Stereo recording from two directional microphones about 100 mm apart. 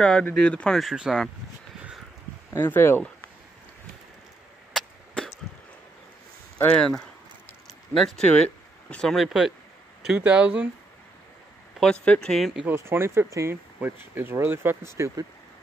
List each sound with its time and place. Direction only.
0.0 s speech: 10° left (ahead or behind)
0.7 s speech: 5° right (ahead or behind)
2.5 s speech: 25° left (ahead or behind)
4.7 s chop: 5° left (ahead or behind)
6.7 s speech: 10° left (ahead or behind)
10.0 s speech: 10° right (ahead or behind)
11.8 s speech: 10° left (ahead or behind)
12.6 s speech: 25° right (ahead or behind)